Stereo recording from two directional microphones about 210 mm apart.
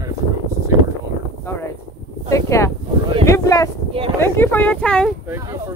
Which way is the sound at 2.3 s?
15° left (ahead or behind).